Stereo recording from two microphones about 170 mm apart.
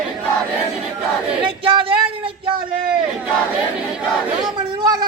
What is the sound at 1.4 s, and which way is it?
Battle cry, 30° right (ahead or behind).